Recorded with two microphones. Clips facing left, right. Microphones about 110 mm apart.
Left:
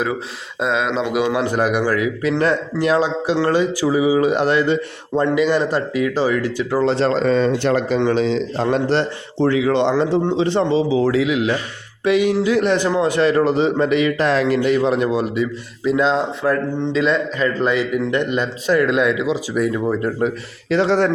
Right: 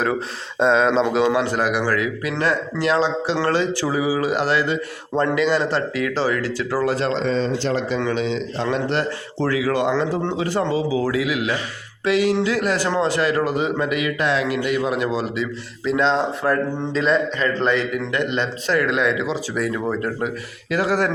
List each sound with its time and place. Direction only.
0.6 s a man's voice: 5° left (ahead or behind)
0.9 s a man's voice: 35° right (ahead or behind)
1.3 s a man's voice: 20° left (ahead or behind)
7.1 s speech: 45° left (ahead or behind)
7.9 s a man's voice: 35° left (ahead or behind)
9.4 s a man's voice: 25° left (ahead or behind)
14.8 s a man's voice: 20° left (ahead or behind)
16.0 s a man's voice: 5° left (ahead or behind)
18.3 s speech: 20° left (ahead or behind)
20.0 s a man's voice: 25° left (ahead or behind)